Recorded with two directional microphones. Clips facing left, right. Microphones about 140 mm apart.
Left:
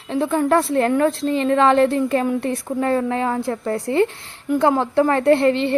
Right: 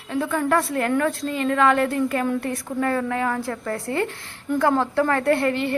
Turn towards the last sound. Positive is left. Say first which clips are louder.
# left 5 dB
turn(degrees=25)  # may be behind; listen again after turning